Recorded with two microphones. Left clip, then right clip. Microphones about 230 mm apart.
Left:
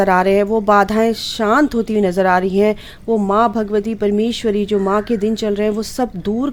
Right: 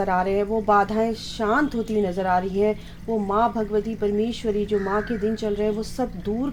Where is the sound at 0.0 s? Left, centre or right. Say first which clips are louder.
Left 9 dB; left.